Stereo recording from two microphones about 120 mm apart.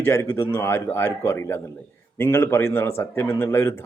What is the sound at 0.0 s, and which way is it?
A man's voice, 20° left (ahead or behind).